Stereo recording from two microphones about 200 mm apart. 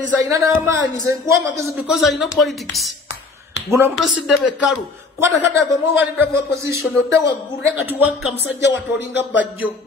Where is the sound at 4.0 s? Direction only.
Centre (ahead or behind).